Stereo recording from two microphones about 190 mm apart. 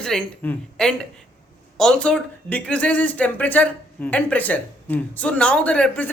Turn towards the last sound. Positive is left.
turn(degrees=5)  # may be behind; listen again after turning